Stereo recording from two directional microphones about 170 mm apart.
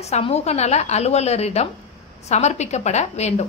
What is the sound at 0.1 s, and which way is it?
A woman's voice, 40° left (ahead or behind).